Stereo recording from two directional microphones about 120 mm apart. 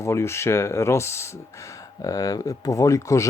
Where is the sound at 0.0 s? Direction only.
20° left (ahead or behind).